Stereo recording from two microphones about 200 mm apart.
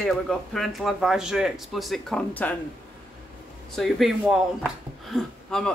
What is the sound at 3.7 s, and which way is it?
A man's voice, centre (ahead or behind).